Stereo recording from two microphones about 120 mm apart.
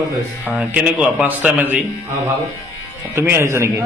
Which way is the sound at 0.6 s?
10° right (ahead or behind).